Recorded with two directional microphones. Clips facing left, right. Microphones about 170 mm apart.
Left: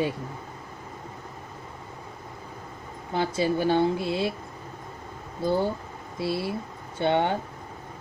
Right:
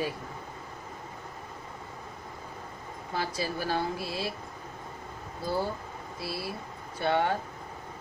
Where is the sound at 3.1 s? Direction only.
25° left (ahead or behind).